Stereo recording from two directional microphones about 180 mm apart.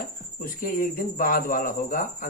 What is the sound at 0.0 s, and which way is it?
Speech, 50° left (ahead or behind).